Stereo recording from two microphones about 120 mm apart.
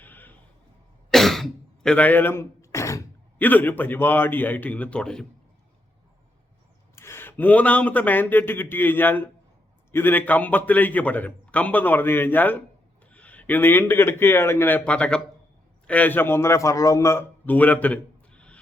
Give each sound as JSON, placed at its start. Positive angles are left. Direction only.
{"t": 0.0, "sound": "a sound", "side_deg": 15}
{"t": 1.1, "sound": "throat clearing", "side_deg": 0}
{"t": 3.3, "sound": "a man's voice", "side_deg": 15}
{"t": 6.9, "sound": "a man's voice", "side_deg": 20}